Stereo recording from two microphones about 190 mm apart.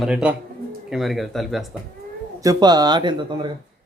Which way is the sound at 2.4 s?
20° right (ahead or behind).